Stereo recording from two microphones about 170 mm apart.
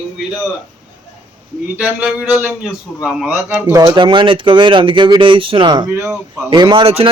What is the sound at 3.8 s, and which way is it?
Speech, 25° right (ahead or behind).